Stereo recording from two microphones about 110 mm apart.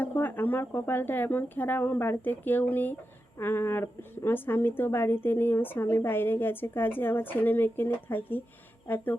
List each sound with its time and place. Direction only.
0.0 s a woman's voice: 15° left (ahead or behind)